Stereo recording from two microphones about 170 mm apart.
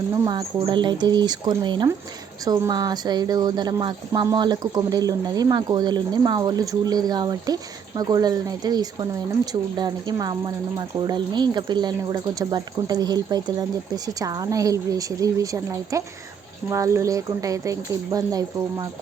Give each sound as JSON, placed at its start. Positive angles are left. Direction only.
{"t": 0.3, "sound": "a woman's voice", "side_deg": -25}